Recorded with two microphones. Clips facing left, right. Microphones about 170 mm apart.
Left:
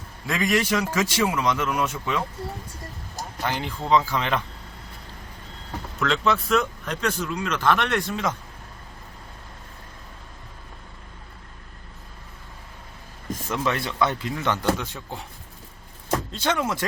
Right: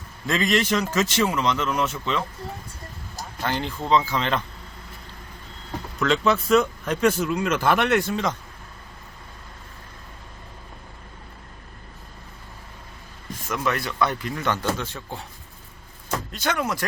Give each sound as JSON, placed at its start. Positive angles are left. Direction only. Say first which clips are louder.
{"t": 0.3, "sound": "speech", "louder": "right 1 dB", "side_deg": 10}
{"t": 3.4, "sound": "speech", "louder": "right 1 dB", "side_deg": 10}
{"t": 6.0, "sound": "speech", "louder": "right 2 dB", "side_deg": 0}
{"t": 13.5, "sound": "speech", "louder": "even", "side_deg": 25}
{"t": 16.0, "sound": "speech", "louder": "left 2 dB", "side_deg": 30}